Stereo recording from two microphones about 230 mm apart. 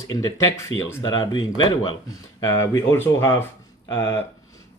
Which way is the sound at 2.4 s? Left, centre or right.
Centre.